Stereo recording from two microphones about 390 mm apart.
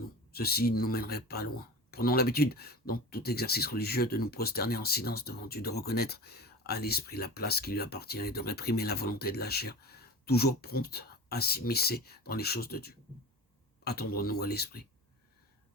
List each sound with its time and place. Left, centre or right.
0.3 s speech: left